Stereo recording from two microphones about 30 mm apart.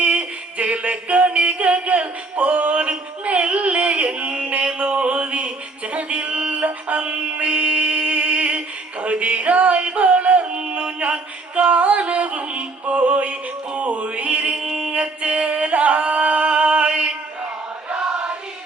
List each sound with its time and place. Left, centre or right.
0.0 s music: right
1.3 s music: right
14.5 s a sound: right
14.9 s singing: right